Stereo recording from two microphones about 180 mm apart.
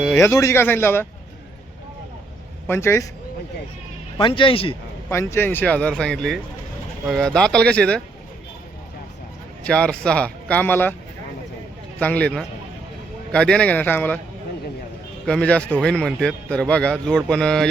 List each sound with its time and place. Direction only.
0.2 s speech: 15° left (ahead or behind)
2.6 s speech: 15° left (ahead or behind)
4.2 s speech: 30° left (ahead or behind)
5.0 s a man's voice: 15° left (ahead or behind)
9.6 s speech: 5° left (ahead or behind)
11.9 s speech: 10° left (ahead or behind)
15.3 s a man's voice: 5° left (ahead or behind)